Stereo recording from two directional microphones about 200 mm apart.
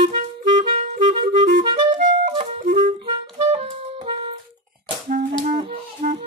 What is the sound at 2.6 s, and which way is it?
Clarinet, 40° right (ahead or behind).